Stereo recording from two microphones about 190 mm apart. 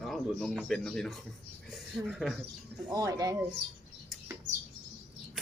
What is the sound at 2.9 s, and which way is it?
Speech, 20° right (ahead or behind).